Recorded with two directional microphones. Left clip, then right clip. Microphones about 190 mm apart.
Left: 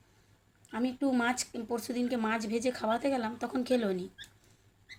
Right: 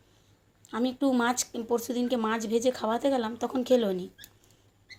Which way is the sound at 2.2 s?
5° right (ahead or behind).